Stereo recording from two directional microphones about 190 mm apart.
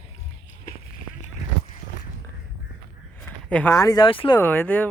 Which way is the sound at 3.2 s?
5° left (ahead or behind).